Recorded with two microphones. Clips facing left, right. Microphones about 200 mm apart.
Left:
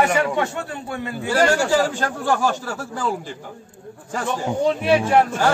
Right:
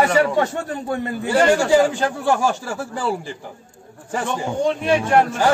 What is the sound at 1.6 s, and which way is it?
Speech, 15° right (ahead or behind).